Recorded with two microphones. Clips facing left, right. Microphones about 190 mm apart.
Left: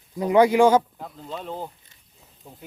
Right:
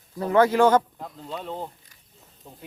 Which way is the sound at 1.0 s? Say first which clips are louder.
Even; centre (ahead or behind).